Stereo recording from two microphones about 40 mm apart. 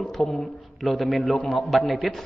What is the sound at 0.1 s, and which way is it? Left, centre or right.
A man's voice, centre.